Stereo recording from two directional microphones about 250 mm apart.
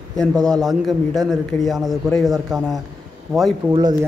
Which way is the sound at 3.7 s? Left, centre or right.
Centre.